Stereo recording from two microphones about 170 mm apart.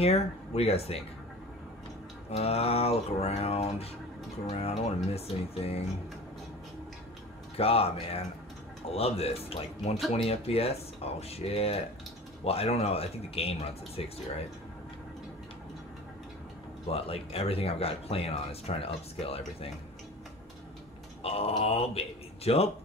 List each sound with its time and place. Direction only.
0.0 s speech: 35° left (ahead or behind)
2.3 s speech: 35° left (ahead or behind)
7.5 s speech: 35° left (ahead or behind)
16.8 s speech: 35° left (ahead or behind)
21.2 s speech: 35° left (ahead or behind)